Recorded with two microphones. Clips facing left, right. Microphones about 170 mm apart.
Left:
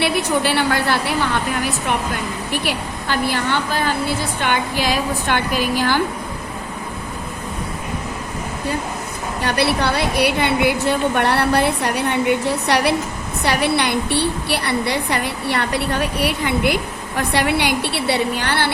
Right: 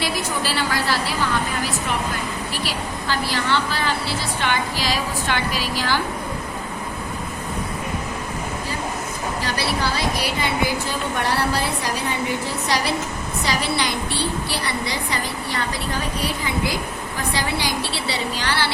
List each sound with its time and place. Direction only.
0.0 s a woman's voice: 60° left (ahead or behind)
2.5 s a woman's voice: 55° left (ahead or behind)
9.4 s a woman's voice: 60° left (ahead or behind)